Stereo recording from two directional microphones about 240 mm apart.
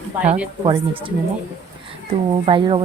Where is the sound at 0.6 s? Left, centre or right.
Right.